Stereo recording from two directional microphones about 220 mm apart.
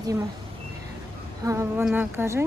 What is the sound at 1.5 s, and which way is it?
Speech, 15° right (ahead or behind).